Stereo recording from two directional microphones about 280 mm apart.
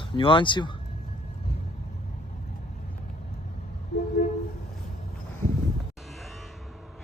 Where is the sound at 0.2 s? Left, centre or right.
Centre.